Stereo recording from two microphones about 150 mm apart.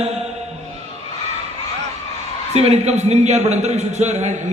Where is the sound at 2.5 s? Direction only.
45° right (ahead or behind).